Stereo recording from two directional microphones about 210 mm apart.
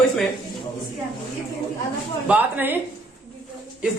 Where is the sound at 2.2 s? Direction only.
10° right (ahead or behind).